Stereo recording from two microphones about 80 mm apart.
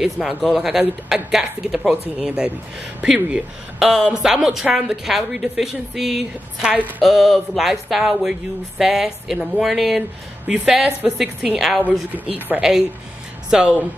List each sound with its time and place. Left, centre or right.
0.0 s speech: centre
10.4 s speech: centre
11.1 s speech: centre
12.1 s speech: right
12.5 s speech: centre